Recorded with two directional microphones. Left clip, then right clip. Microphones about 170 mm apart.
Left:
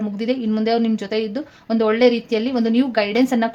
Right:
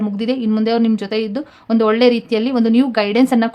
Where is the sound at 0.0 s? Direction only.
20° right (ahead or behind).